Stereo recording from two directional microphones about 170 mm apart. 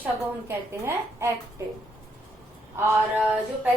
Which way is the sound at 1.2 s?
15° right (ahead or behind).